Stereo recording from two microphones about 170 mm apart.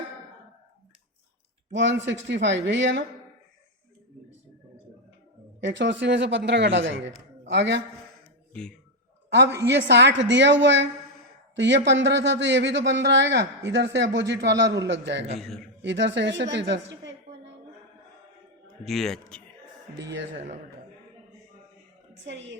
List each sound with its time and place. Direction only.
1.7 s a man's voice: 90° right
5.5 s a man's voice: 90° right
9.6 s a man's voice: 90° right
15.4 s a man's voice: centre (ahead or behind)
15.8 s a woman's voice: 90° right
18.9 s a man's voice: centre (ahead or behind)
20.0 s a man's voice: 90° right
20.3 s speech: 45° right (ahead or behind)
22.3 s a man's voice: 90° right